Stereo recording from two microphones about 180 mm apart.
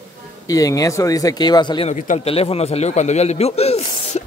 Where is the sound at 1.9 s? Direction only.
40° left (ahead or behind).